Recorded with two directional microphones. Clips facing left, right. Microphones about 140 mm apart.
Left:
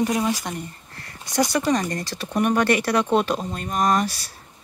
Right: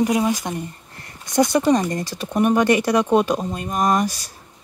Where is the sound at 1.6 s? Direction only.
10° right (ahead or behind).